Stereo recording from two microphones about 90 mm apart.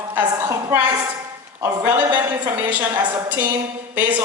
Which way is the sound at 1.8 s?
30° right (ahead or behind).